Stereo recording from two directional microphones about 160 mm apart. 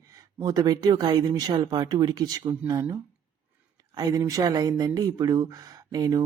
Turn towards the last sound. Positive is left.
turn(degrees=-25)  # may be behind; listen again after turning